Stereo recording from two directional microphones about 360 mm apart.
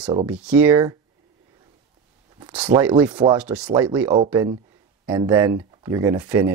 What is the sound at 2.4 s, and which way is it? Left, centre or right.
Speech, centre.